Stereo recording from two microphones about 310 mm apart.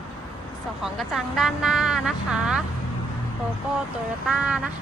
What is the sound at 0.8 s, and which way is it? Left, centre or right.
Speech, centre.